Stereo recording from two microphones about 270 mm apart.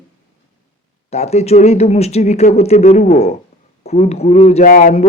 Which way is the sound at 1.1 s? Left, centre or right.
Left.